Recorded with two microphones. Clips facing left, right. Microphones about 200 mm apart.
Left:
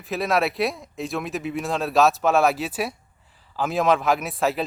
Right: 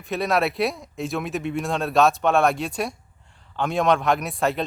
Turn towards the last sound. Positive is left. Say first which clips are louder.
# even
turn(degrees=0)  # may be behind; listen again after turning